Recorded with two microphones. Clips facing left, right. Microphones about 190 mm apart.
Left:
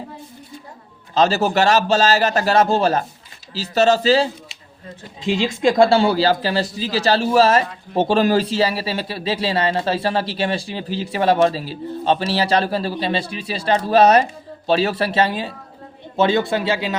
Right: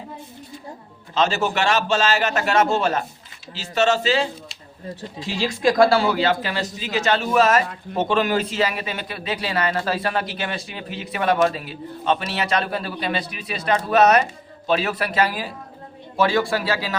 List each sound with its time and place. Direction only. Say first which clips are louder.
1.1 s speech: left 4 dB; 35° left (ahead or behind)
5.2 s speech: left 3 dB; 20° left (ahead or behind)